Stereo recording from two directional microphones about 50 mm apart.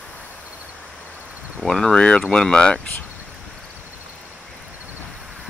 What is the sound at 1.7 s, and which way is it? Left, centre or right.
Speech, centre.